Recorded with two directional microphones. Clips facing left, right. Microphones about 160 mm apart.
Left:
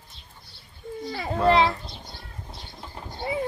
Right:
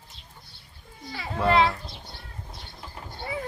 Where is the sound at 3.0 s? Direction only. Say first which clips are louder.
Left 5 dB; 20° left (ahead or behind).